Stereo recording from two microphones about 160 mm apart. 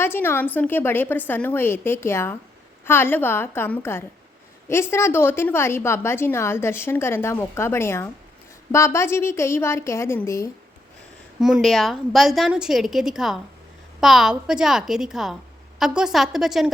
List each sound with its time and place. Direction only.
0.0 s a woman's voice: 15° left (ahead or behind)
11.3 s a woman's voice: centre (ahead or behind)